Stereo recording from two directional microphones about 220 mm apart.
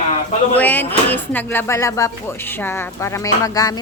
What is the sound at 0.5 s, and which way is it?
Speech, 5° left (ahead or behind).